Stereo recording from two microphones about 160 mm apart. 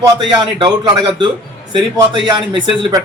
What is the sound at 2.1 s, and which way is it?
Speech, 30° right (ahead or behind).